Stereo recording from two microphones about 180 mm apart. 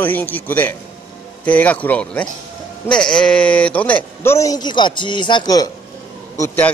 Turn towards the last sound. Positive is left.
turn(degrees=10)  # may be behind; listen again after turning